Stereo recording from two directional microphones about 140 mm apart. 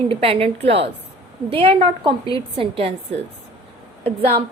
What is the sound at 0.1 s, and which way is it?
A woman's voice, 40° right (ahead or behind).